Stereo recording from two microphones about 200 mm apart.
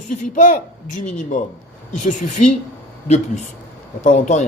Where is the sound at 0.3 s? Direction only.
40° left (ahead or behind).